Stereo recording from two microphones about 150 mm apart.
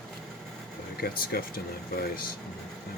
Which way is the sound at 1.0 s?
90° left.